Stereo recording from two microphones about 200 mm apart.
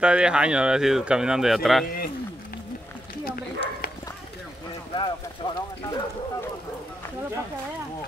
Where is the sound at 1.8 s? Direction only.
50° left (ahead or behind).